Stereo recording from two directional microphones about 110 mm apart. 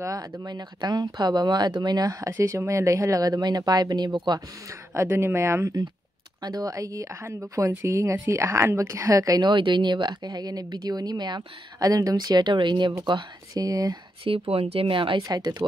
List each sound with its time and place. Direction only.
0.0 s a woman's voice: 30° right (ahead or behind)
4.9 s a woman's voice: 25° right (ahead or behind)
14.5 s speech: 60° right (ahead or behind)
15.2 s a woman's voice: 35° right (ahead or behind)